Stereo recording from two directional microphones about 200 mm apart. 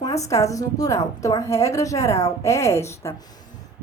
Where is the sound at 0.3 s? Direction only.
15° left (ahead or behind).